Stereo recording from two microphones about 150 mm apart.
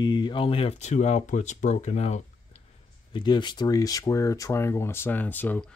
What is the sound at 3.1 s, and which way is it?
Speech, 30° left (ahead or behind).